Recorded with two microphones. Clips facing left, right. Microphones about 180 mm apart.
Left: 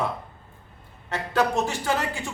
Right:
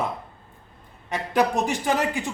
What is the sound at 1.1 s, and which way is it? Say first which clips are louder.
A man's voice: right 1 dB; 15° right (ahead or behind).